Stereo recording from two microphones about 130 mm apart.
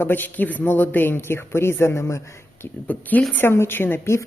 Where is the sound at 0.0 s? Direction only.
15° left (ahead or behind).